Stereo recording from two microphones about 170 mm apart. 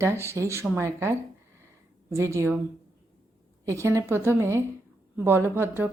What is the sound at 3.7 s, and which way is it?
A woman's voice, 15° right (ahead or behind).